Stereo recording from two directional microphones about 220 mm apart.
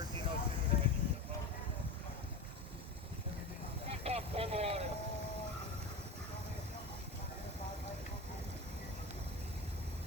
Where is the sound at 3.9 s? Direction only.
25° right (ahead or behind).